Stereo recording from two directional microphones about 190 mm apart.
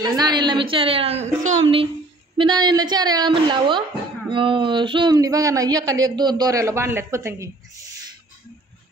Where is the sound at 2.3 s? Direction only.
25° right (ahead or behind).